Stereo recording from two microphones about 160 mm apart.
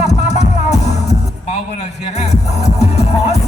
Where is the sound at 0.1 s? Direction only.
45° left (ahead or behind).